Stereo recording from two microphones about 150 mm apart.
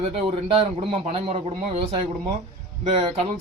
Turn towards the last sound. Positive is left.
turn(degrees=-40)  # may be behind; listen again after turning